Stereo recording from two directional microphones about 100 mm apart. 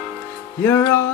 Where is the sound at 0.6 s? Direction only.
25° left (ahead or behind).